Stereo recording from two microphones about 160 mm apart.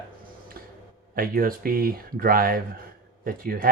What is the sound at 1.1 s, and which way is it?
Speech, 65° right (ahead or behind).